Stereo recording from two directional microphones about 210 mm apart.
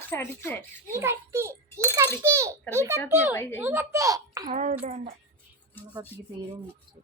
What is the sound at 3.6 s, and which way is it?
Speech, 10° right (ahead or behind).